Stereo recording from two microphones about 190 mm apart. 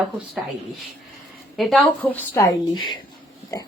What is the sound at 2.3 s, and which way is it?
Speech, 20° left (ahead or behind).